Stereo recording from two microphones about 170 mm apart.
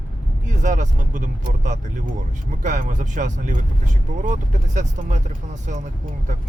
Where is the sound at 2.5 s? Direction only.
50° right (ahead or behind).